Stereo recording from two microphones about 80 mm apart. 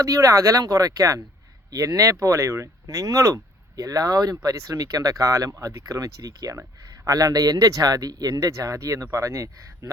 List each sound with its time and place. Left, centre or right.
0.0 s speech: right